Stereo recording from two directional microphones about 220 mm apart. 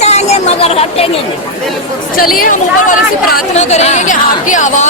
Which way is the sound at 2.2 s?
40° left (ahead or behind).